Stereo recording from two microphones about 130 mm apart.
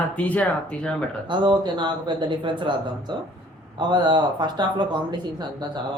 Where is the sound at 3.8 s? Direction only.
35° right (ahead or behind).